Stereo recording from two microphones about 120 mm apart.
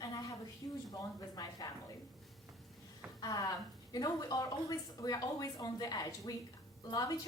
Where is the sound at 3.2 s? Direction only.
30° left (ahead or behind).